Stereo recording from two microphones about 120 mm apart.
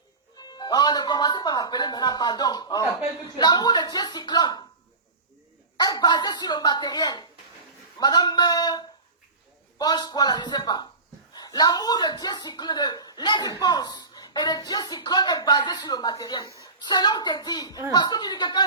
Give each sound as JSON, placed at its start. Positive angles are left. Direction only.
{"t": 0.3, "sound": "speech", "side_deg": 35}
{"t": 5.7, "sound": "speech", "side_deg": 35}